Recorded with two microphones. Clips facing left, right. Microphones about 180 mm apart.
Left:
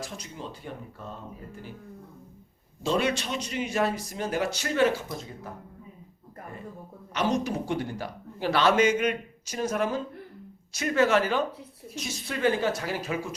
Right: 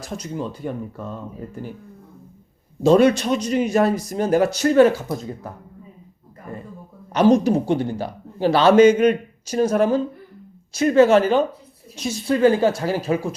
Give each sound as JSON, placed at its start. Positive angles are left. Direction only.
{"t": 0.0, "sound": "speech", "side_deg": -45}
{"t": 2.8, "sound": "speech", "side_deg": -45}
{"t": 7.1, "sound": "speech", "side_deg": -35}